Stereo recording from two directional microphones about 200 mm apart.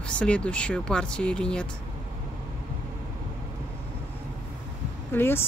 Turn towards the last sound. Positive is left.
turn(degrees=10)  # may be behind; listen again after turning